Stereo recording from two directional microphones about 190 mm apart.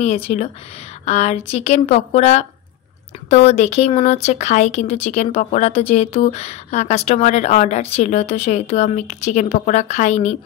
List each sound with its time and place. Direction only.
0.0 s speech: 35° left (ahead or behind)